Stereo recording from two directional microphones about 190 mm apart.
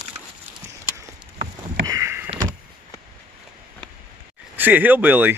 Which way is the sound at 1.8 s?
15° right (ahead or behind).